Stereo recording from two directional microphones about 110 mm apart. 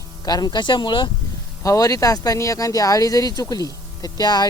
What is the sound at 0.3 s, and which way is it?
Speech, 35° left (ahead or behind).